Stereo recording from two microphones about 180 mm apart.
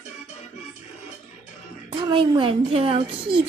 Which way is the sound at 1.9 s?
30° right (ahead or behind).